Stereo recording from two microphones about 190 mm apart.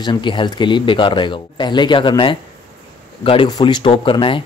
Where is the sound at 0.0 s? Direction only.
25° left (ahead or behind).